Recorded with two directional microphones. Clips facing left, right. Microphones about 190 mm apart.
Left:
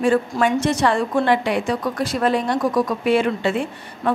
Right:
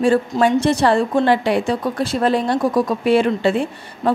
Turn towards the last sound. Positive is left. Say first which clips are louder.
# right 3 dB
turn(degrees=-35)  # may be behind; listen again after turning